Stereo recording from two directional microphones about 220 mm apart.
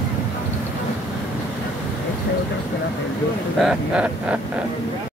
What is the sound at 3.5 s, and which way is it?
Speech, 5° right (ahead or behind).